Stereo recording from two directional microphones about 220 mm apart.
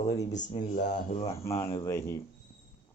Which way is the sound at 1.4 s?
10° left (ahead or behind).